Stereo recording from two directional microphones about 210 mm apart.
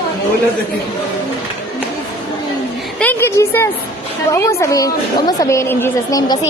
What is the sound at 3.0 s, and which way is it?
A woman's voice, 10° left (ahead or behind).